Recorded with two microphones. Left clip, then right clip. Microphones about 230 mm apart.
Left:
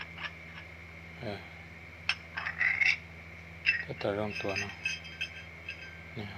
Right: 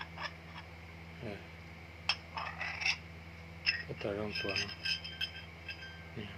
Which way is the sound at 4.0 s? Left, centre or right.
Centre.